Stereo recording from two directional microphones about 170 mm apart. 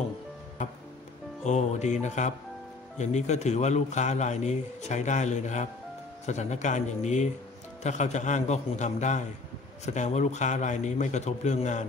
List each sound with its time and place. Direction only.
1.4 s a man's voice: 40° left (ahead or behind)